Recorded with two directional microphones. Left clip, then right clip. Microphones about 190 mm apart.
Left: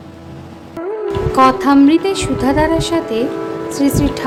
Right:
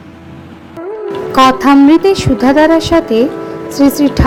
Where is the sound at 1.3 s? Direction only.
25° right (ahead or behind).